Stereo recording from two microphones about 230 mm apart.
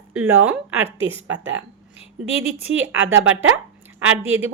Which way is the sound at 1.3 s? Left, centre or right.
Right.